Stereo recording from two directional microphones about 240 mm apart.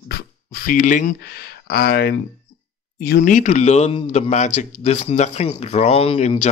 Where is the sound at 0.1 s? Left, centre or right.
Left.